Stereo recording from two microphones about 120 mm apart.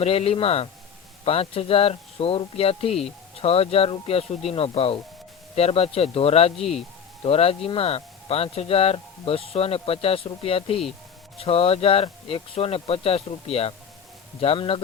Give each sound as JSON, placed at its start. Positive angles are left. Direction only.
{"t": 0.0, "sound": "speech", "side_deg": 55}